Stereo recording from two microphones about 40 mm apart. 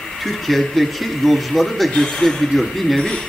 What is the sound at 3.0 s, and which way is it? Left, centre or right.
Speech, centre.